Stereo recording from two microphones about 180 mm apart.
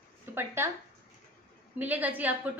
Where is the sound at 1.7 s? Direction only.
10° right (ahead or behind).